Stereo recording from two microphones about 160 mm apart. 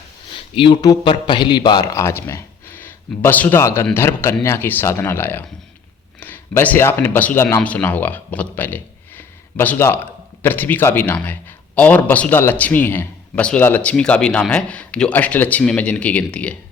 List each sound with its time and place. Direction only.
0.3 s a man's voice: 35° left (ahead or behind); by 16.6 s 10° left (ahead or behind)